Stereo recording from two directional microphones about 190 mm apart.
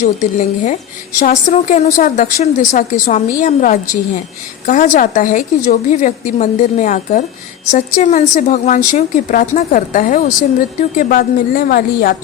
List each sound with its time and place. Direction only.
0.0 s a woman's voice: 40° left (ahead or behind)